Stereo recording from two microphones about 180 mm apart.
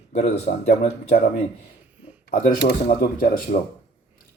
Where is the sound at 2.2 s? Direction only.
50° left (ahead or behind).